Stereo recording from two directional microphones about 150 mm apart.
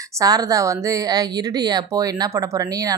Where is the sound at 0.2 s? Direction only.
25° right (ahead or behind).